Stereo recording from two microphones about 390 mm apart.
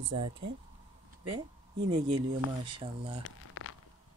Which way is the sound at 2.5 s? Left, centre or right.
Centre.